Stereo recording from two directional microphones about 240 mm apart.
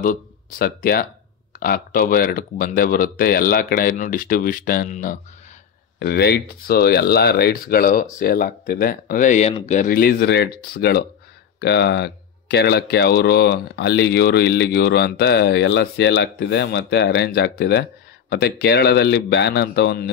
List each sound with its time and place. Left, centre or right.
0.0 s a man's voice: left